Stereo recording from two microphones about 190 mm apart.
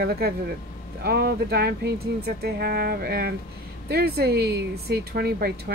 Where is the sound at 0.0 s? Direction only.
55° right (ahead or behind).